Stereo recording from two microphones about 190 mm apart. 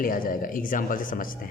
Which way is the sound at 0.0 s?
45° left (ahead or behind).